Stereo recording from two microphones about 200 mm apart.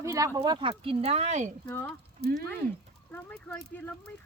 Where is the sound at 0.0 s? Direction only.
15° right (ahead or behind); by 1.5 s 35° right (ahead or behind).